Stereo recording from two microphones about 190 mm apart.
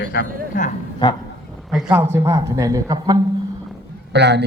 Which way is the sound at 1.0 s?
20° left (ahead or behind).